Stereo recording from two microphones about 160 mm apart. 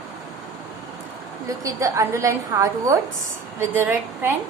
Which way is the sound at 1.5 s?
20° right (ahead or behind).